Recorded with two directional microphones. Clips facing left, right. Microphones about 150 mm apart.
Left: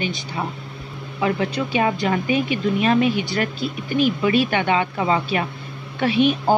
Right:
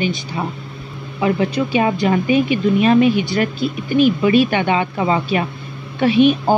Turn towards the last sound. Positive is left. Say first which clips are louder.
# right 4 dB
turn(degrees=-20)  # may be behind; listen again after turning